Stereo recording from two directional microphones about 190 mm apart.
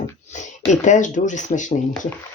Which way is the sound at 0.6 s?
40° left (ahead or behind).